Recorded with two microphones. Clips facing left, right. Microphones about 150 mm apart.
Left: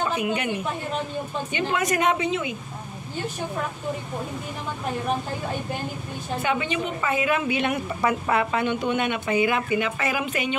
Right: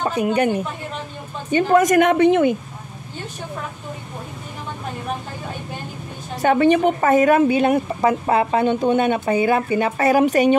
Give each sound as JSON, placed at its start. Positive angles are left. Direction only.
{"t": 0.0, "sound": "a woman's voice", "side_deg": -40}
{"t": 6.4, "sound": "speech", "side_deg": -45}